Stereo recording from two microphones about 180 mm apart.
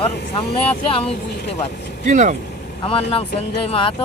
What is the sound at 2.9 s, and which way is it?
Speech, 30° left (ahead or behind).